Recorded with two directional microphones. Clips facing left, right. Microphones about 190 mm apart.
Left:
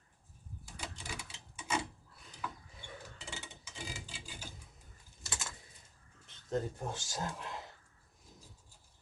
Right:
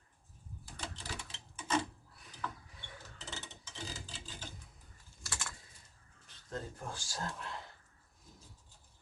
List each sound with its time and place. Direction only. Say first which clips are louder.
0.8 s typewriter: even; 10° left (ahead or behind)
2.4 s pulleys: right 1 dB; 10° left (ahead or behind)
2.8 s mechanisms: left 4 dB; 10° left (ahead or behind)
3.2 s a sound: even; 10° left (ahead or behind)
5.2 s typing: left 1 dB; 20° left (ahead or behind)
6.2 s speech: left 7 dB; 25° left (ahead or behind)